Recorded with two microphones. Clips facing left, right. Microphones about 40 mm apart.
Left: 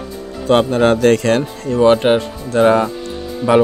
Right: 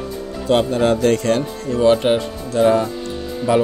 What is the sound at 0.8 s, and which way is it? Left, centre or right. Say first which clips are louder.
Speech: left 4 dB; left.